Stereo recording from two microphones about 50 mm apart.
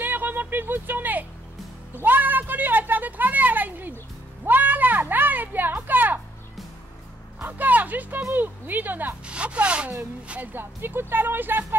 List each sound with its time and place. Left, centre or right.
0.0 s a sound: right
5.1 s music: right
7.4 s a woman's voice: right
9.2 s speech: right
10.4 s speech: right